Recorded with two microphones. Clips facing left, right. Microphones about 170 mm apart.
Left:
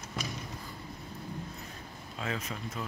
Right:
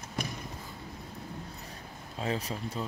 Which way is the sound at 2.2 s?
35° right (ahead or behind).